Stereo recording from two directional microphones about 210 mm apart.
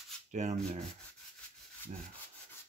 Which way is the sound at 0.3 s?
35° right (ahead or behind).